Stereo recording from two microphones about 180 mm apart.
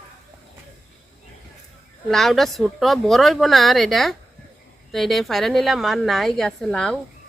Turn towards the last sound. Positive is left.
turn(degrees=5)  # may be behind; listen again after turning